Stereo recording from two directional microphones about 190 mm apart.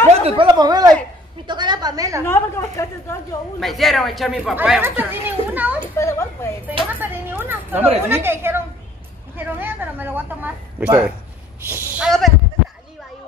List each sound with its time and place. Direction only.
0.0 s a sound: 30° right (ahead or behind)
0.5 s a woman's voice: 20° right (ahead or behind)
2.2 s a woman's voice: 10° left (ahead or behind)
3.5 s speech: centre (ahead or behind)
5.9 s a woman's voice: 15° left (ahead or behind)
7.0 s a woman's voice: 10° right (ahead or behind)